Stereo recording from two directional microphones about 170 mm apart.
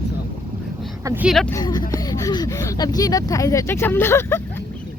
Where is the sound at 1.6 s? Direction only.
25° left (ahead or behind).